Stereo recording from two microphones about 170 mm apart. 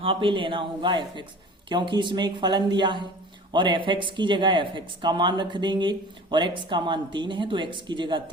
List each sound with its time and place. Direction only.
0.0 s speech: 30° right (ahead or behind)